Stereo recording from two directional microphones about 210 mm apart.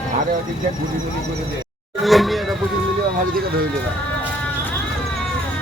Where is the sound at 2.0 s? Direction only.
Centre (ahead or behind).